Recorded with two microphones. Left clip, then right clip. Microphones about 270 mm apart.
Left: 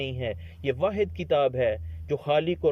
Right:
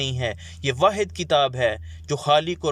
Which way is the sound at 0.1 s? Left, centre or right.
Centre.